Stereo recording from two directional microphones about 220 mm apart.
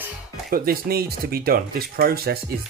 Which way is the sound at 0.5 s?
45° right (ahead or behind).